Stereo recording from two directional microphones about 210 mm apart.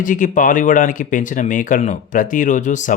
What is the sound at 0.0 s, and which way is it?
Speech, 40° left (ahead or behind).